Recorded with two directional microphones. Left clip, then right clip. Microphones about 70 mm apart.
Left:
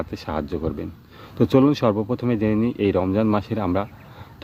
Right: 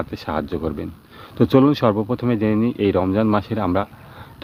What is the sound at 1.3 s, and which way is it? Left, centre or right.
Speech, left.